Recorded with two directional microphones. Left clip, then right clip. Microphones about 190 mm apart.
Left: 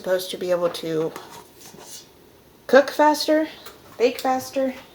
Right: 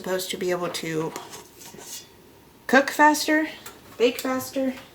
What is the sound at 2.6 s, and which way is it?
Speech, 50° right (ahead or behind).